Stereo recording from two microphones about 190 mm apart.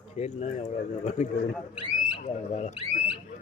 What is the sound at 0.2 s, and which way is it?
Speech, 30° left (ahead or behind).